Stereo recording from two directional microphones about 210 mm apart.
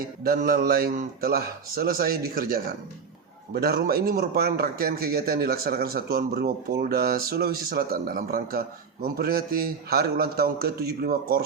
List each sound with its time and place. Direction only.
0.3 s a man's voice: 45° right (ahead or behind)